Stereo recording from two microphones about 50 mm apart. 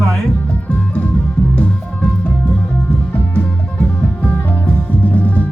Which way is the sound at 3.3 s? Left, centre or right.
Left.